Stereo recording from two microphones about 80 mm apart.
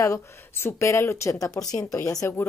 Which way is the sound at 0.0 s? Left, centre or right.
Left.